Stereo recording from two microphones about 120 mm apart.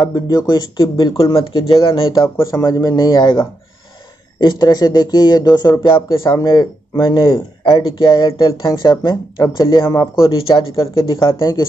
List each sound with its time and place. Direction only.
0.0 s speech: 35° left (ahead or behind)
2.2 s speech: 20° left (ahead or behind)
10.1 s speech: 45° left (ahead or behind)